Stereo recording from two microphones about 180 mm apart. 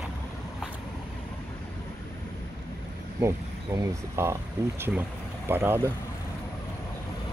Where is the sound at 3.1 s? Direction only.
15° right (ahead or behind).